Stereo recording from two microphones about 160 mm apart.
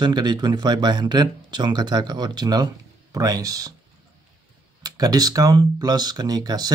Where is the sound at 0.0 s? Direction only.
25° right (ahead or behind).